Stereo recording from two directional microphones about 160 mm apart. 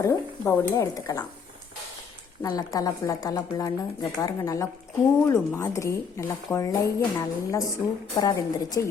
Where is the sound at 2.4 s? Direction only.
20° left (ahead or behind).